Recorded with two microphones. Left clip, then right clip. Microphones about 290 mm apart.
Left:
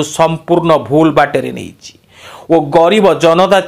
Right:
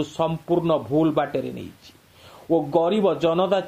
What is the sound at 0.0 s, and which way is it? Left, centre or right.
A man's voice, left.